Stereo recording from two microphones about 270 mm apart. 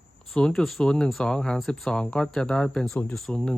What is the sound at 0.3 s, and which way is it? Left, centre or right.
Speech, centre.